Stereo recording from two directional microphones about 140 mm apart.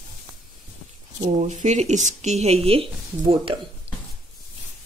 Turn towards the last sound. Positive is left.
turn(degrees=-45)  # may be behind; listen again after turning